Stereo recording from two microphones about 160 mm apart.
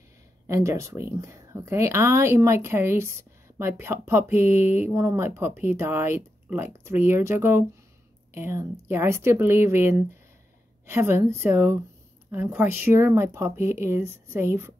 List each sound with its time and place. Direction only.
0.5 s speech: 20° right (ahead or behind)